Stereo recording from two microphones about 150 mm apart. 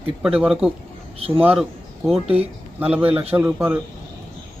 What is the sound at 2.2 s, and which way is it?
Speech, 40° right (ahead or behind).